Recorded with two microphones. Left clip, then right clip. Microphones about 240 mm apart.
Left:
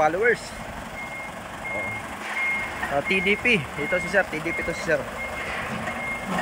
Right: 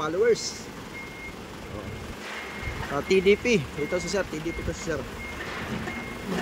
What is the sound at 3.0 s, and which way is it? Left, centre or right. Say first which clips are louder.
Speech: right 1 dB; centre.